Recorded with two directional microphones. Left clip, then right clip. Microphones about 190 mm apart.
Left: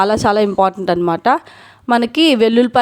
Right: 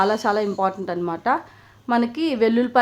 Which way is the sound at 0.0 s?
45° left (ahead or behind).